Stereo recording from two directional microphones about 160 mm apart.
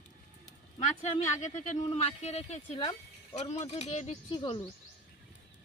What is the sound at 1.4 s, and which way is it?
Speech, 50° left (ahead or behind).